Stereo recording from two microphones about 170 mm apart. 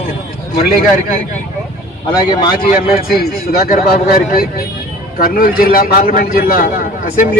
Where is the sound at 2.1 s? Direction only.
25° left (ahead or behind).